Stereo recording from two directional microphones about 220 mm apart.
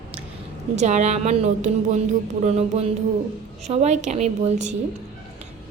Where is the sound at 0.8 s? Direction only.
30° right (ahead or behind).